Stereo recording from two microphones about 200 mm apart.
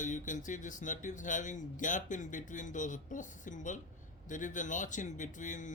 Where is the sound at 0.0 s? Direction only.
40° left (ahead or behind).